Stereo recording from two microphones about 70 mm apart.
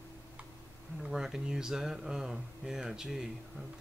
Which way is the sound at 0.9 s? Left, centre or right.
Centre.